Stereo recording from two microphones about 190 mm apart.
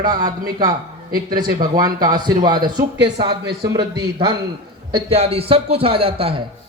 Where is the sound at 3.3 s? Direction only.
55° right (ahead or behind).